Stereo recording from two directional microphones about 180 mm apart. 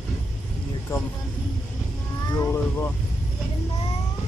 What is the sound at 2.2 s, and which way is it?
Speech, 15° left (ahead or behind).